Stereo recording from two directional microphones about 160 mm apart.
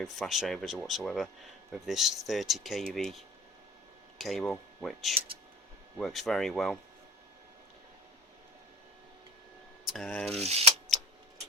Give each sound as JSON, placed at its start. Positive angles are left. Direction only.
{"t": 0.0, "sound": "speech", "side_deg": 0}
{"t": 4.2, "sound": "speech", "side_deg": 0}
{"t": 9.8, "sound": "speech", "side_deg": 5}
{"t": 10.4, "sound": "speech", "side_deg": -40}